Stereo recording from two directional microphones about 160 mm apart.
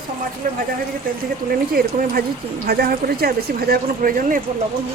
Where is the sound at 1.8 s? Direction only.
70° right (ahead or behind).